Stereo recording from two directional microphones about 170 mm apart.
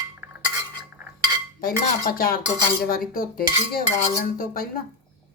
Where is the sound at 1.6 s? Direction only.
60° left (ahead or behind).